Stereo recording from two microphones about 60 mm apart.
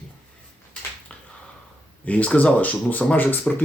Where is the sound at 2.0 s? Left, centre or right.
Left.